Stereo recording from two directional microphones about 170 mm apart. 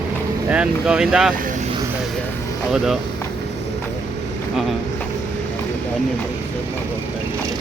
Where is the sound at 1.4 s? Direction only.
50° right (ahead or behind).